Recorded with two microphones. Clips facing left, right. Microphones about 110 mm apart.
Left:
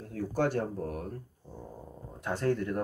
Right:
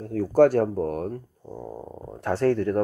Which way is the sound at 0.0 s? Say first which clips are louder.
Right 12 dB; 50° right (ahead or behind).